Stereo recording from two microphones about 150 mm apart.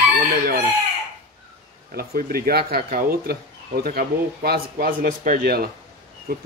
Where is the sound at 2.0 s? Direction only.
90° right.